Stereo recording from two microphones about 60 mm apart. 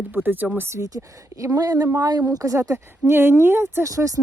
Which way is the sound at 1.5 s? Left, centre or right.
Right.